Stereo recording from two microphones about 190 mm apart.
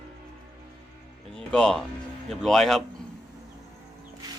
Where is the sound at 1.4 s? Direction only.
5° left (ahead or behind).